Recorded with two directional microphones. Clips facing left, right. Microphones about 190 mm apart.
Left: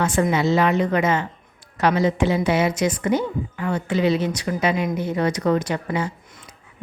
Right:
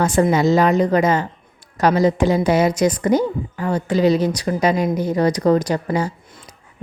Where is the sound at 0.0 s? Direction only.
40° right (ahead or behind).